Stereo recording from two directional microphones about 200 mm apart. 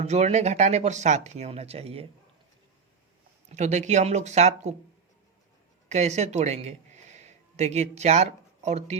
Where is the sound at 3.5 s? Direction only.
35° right (ahead or behind).